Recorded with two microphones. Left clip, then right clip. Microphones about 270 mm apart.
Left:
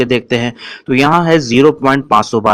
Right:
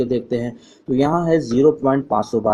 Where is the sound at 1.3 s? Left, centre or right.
Left.